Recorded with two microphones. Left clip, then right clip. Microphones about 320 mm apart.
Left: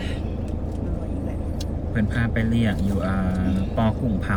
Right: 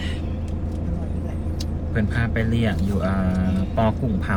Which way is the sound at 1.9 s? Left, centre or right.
Centre.